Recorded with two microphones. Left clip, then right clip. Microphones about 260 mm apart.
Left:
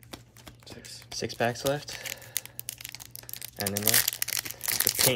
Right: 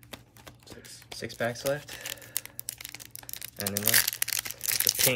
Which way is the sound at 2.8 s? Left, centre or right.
Centre.